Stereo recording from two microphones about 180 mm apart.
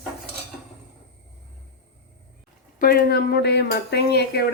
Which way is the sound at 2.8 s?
55° left (ahead or behind).